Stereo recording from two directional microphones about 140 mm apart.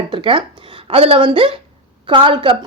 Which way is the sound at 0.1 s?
35° right (ahead or behind).